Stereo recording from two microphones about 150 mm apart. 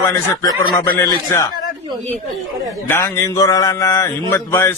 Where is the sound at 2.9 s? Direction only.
20° left (ahead or behind).